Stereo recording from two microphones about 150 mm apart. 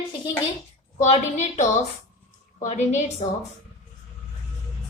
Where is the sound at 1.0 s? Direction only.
45° left (ahead or behind).